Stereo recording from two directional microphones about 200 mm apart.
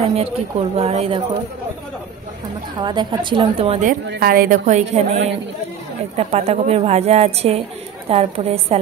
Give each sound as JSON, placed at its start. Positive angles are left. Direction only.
{"t": 0.1, "sound": "speech", "side_deg": -30}
{"t": 2.8, "sound": "speech", "side_deg": -20}
{"t": 4.1, "sound": "a woman's voice", "side_deg": -45}